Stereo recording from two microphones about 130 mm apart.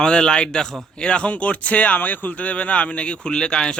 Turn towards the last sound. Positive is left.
turn(degrees=5)  # may be behind; listen again after turning